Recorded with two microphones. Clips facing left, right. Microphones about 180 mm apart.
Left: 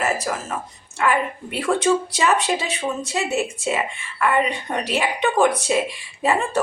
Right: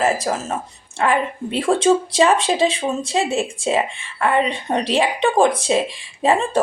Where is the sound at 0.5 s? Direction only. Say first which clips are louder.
Right 3 dB; 30° right (ahead or behind).